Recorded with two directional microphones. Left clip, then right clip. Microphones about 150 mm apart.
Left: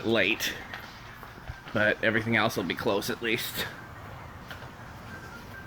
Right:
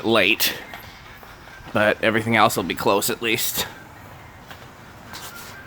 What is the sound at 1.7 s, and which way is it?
Speech, 55° right (ahead or behind).